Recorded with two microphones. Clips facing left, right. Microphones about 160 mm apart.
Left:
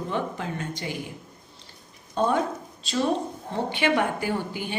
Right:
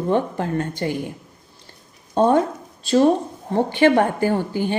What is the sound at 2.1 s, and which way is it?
Speech, 55° right (ahead or behind).